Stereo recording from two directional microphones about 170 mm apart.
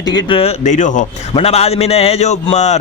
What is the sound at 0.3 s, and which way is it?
Speech, 30° left (ahead or behind).